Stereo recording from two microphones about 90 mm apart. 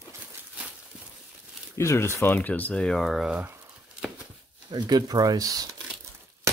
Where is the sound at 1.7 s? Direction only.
30° left (ahead or behind); by 3.4 s 5° right (ahead or behind).